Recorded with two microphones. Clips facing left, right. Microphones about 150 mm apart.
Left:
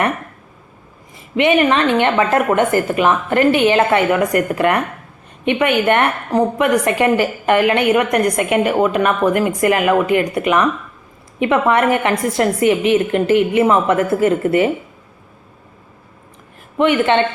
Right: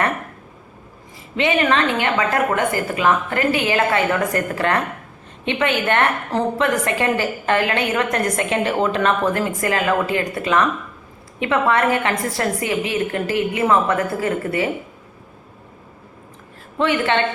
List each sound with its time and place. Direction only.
1.4 s a woman's voice: 20° left (ahead or behind)
16.7 s a woman's voice: 20° left (ahead or behind)